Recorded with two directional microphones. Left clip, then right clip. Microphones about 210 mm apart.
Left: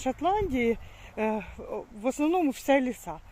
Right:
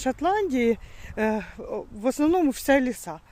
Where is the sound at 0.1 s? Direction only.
25° right (ahead or behind).